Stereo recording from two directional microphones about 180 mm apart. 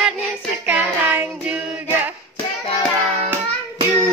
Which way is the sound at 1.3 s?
5° right (ahead or behind).